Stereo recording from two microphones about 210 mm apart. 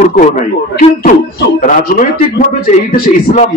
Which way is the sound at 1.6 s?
40° left (ahead or behind).